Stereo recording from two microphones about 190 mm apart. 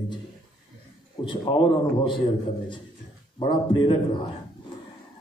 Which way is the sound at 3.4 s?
25° left (ahead or behind).